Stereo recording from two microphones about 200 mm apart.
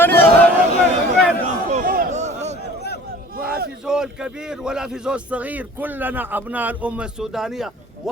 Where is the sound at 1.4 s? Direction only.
40° right (ahead or behind).